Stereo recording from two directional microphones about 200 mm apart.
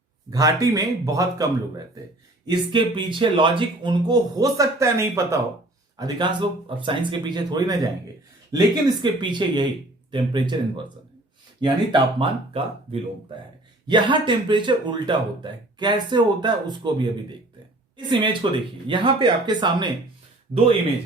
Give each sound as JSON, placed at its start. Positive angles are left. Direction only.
{"t": 0.3, "sound": "speech", "side_deg": -15}
{"t": 2.5, "sound": "speech", "side_deg": -25}